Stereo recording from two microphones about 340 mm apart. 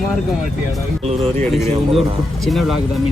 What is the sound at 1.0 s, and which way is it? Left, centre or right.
Speech, centre.